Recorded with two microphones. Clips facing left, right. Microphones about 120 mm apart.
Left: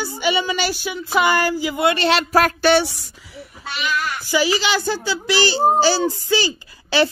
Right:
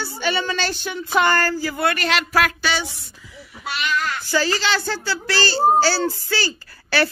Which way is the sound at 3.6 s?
5° left (ahead or behind).